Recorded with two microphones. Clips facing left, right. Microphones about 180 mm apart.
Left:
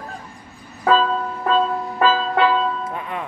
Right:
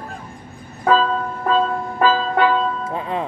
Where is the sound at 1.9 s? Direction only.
10° right (ahead or behind).